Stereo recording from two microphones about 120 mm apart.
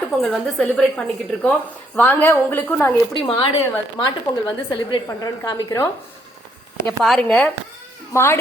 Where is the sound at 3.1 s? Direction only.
50° left (ahead or behind).